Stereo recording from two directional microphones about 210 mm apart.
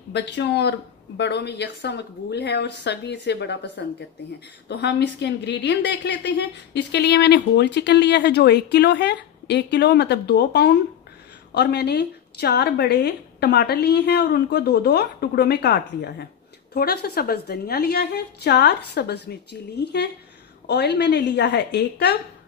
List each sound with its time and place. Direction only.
0.1 s a woman's voice: 55° left (ahead or behind)